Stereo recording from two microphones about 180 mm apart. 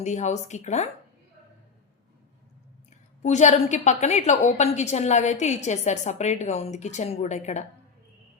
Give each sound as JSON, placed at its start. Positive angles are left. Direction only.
{"t": 0.0, "sound": "a woman's voice", "side_deg": 40}
{"t": 3.2, "sound": "a woman's voice", "side_deg": 40}